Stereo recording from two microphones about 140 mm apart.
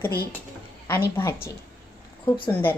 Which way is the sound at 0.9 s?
15° left (ahead or behind).